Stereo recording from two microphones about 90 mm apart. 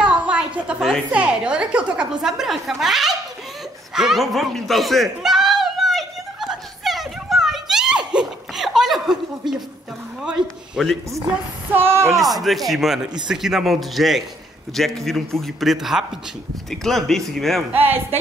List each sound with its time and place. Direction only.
0.0 s a sound: 15° right (ahead or behind)
1.1 s a woman's voice: 10° right (ahead or behind)
3.9 s a sound: 5° right (ahead or behind)
10.4 s speech: 60° right (ahead or behind)
10.8 s a man's voice: 5° right (ahead or behind)
11.7 s speech: 25° right (ahead or behind)
12.1 s a man's voice: centre (ahead or behind)
17.6 s speech: 20° right (ahead or behind)